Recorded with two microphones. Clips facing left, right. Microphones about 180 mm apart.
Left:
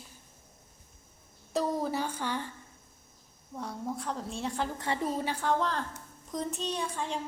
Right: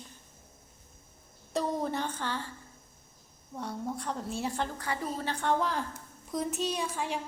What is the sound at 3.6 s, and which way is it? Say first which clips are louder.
A woman's voice: even; centre (ahead or behind).